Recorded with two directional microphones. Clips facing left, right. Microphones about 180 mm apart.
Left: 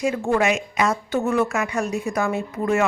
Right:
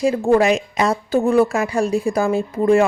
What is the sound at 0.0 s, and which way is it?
A woman's voice, 35° right (ahead or behind).